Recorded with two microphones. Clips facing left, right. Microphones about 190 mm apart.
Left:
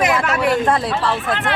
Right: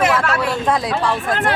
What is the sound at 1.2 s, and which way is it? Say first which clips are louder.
Speech: right 2 dB; 45° right (ahead or behind).